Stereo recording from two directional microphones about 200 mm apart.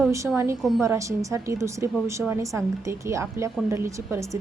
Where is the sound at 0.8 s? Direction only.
15° right (ahead or behind).